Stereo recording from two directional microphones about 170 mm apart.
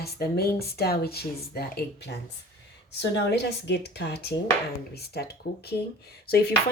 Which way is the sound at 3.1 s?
80° left.